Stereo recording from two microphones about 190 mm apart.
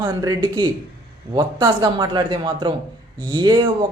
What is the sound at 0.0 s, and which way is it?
Speech, 20° right (ahead or behind).